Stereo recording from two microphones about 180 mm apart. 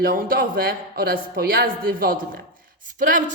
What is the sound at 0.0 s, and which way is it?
Speech, 50° right (ahead or behind).